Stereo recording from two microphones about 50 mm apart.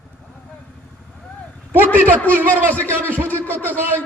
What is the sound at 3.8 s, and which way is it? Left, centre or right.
Speech, right.